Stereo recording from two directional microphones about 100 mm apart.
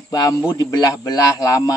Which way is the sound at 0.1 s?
35° left (ahead or behind).